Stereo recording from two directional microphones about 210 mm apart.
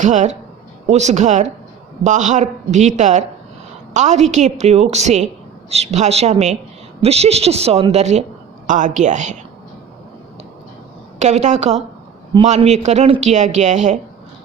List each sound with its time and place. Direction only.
0.0 s a woman's voice: 35° right (ahead or behind)
11.2 s speech: 35° right (ahead or behind)